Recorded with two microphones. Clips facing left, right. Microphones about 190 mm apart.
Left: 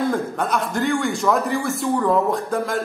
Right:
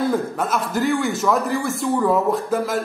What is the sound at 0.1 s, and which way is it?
A man's voice, 5° right (ahead or behind).